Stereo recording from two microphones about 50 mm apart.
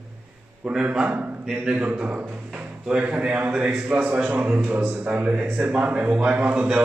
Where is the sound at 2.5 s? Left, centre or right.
Right.